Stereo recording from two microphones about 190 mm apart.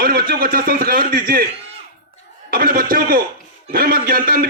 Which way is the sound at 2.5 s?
50° right (ahead or behind).